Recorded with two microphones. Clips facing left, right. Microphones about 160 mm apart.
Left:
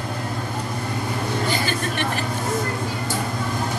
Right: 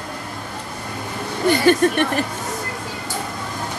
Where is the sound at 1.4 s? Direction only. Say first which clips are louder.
Right 9 dB; 60° right (ahead or behind).